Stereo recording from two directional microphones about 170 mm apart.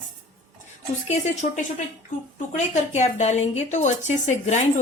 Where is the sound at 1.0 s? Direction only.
45° left (ahead or behind).